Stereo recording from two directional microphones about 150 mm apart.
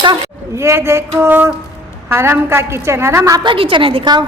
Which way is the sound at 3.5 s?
35° right (ahead or behind).